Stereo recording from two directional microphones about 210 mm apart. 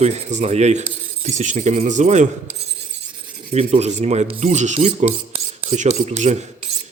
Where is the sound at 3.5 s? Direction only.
30° right (ahead or behind).